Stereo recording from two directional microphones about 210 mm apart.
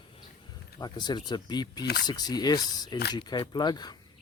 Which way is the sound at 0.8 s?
20° left (ahead or behind).